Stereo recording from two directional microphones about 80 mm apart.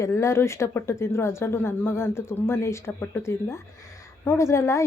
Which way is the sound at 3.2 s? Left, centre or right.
Left.